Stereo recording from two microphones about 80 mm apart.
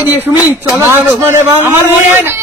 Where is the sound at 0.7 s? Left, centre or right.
Right.